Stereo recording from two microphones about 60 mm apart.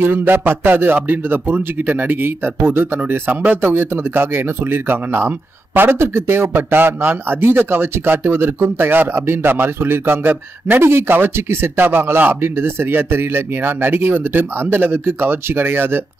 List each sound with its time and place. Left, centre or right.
0.0 s speech: right